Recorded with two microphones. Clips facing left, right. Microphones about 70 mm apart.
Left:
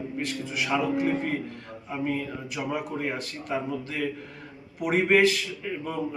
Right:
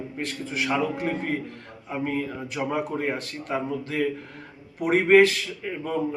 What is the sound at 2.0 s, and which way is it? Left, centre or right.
A man's voice, right.